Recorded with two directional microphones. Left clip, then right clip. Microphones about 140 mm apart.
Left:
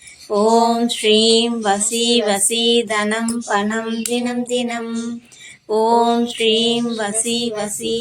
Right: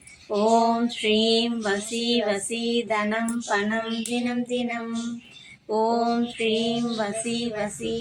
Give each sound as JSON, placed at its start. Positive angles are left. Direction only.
{"t": 0.3, "sound": "female singing", "side_deg": 25}
{"t": 3.5, "sound": "child singing", "side_deg": 15}
{"t": 4.1, "sound": "female singing", "side_deg": 20}